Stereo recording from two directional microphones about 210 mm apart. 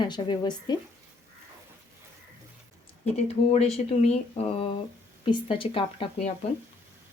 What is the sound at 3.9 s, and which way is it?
Speech, 30° left (ahead or behind).